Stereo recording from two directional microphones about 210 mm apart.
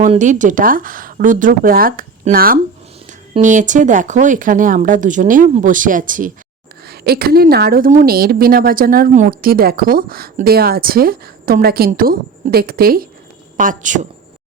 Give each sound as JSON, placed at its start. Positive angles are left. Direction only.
{"t": 0.0, "sound": "a woman's voice", "side_deg": -35}